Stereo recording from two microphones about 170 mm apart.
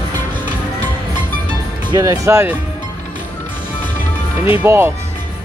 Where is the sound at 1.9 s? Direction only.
20° right (ahead or behind).